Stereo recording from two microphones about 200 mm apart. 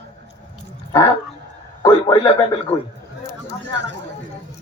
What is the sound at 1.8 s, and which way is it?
Speech, 20° left (ahead or behind).